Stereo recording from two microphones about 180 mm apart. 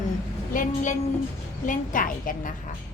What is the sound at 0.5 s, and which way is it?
A woman's voice, 45° left (ahead or behind).